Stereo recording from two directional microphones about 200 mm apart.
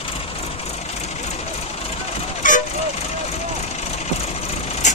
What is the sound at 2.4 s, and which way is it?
Vehicle, 40° left (ahead or behind).